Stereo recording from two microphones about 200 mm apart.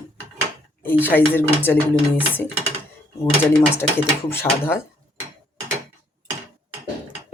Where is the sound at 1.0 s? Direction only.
10° left (ahead or behind).